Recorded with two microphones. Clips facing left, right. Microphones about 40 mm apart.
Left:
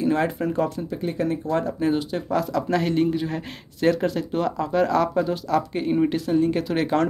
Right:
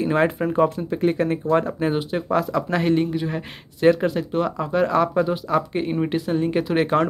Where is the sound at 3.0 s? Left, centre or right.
Centre.